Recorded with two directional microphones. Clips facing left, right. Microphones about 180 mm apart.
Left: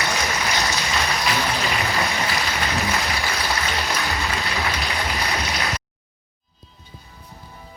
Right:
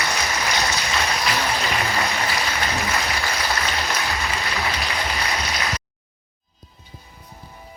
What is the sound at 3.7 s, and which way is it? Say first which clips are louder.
Applause: even; centre (ahead or behind).